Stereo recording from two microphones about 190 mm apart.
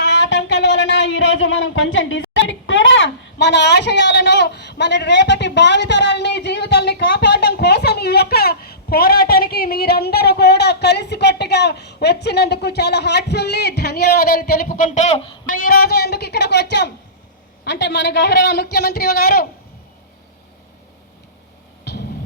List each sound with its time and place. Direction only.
0.0 s a sound: 65° left (ahead or behind)
14.9 s a man's voice: 35° left (ahead or behind)
15.4 s speech: 50° left (ahead or behind)
21.9 s music: 60° left (ahead or behind)